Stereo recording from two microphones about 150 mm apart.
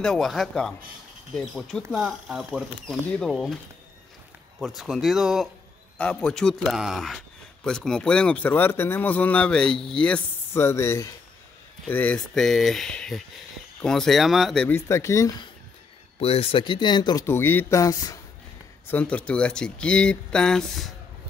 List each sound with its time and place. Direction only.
0.0 s speech: 5° left (ahead or behind)
4.6 s a man's voice: centre (ahead or behind)
14.7 s speech: 20° left (ahead or behind)
16.2 s speech: 40° left (ahead or behind)
17.3 s speech: 15° left (ahead or behind)
18.9 s a man's voice: 10° left (ahead or behind)